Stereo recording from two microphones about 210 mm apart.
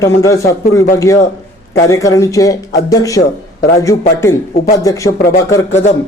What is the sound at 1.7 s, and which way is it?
Speech, 15° left (ahead or behind).